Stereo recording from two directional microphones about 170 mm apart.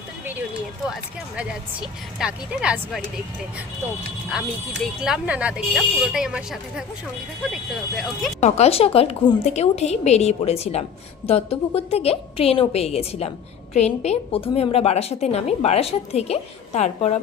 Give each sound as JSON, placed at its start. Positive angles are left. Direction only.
{"t": 2.1, "sound": "speech", "side_deg": -5}
{"t": 4.8, "sound": "speech", "side_deg": -5}
{"t": 8.4, "sound": "a woman's voice", "side_deg": 40}